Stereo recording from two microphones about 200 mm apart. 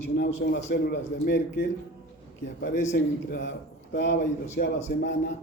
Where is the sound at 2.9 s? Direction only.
55° left (ahead or behind).